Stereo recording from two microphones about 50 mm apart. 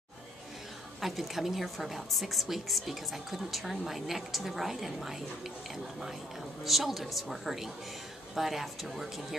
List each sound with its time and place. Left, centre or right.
1.0 s a woman's voice: centre
6.6 s a woman's voice: centre